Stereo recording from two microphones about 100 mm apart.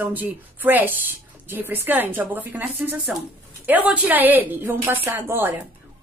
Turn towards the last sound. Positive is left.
turn(degrees=-25)  # may be behind; listen again after turning